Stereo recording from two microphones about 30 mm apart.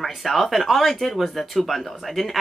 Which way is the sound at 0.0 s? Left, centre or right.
Centre.